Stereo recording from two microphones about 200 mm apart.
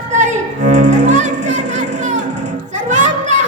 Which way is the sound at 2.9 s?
40° right (ahead or behind).